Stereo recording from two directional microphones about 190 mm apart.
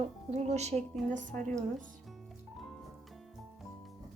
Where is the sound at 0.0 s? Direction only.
30° right (ahead or behind).